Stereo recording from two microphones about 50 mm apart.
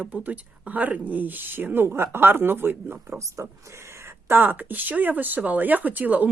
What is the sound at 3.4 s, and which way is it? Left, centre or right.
Speech, right.